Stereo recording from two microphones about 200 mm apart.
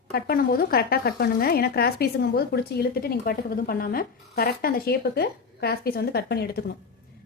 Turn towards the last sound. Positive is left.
turn(degrees=50)  # may be behind; listen again after turning